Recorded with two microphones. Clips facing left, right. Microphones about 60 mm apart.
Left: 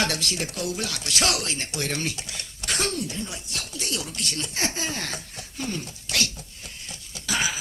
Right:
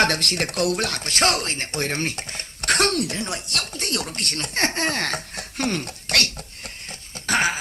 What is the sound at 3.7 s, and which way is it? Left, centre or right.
Speech, right.